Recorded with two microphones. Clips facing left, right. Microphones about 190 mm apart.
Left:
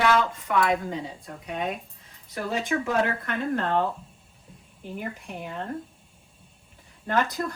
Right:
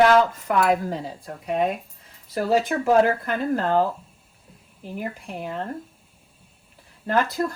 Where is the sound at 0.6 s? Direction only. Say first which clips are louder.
Right 4 dB; centre (ahead or behind).